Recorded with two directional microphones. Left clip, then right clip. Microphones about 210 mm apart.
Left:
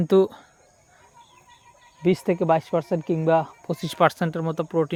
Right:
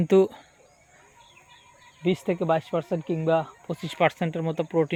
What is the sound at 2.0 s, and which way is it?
Speech, 30° left (ahead or behind).